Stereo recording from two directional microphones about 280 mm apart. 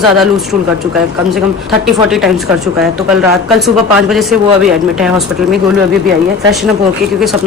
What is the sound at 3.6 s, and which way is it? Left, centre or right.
Speech, centre.